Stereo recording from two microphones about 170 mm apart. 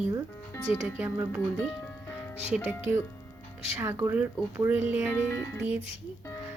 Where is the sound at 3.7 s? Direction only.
15° right (ahead or behind).